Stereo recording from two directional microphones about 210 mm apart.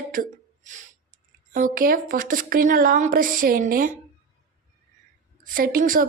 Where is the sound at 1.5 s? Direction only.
40° right (ahead or behind).